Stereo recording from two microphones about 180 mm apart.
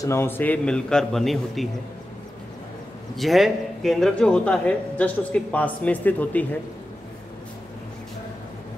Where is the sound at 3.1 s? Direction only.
Centre (ahead or behind).